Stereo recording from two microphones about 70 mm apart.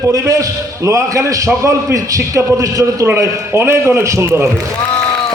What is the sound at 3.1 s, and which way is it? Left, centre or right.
A man's voice, right.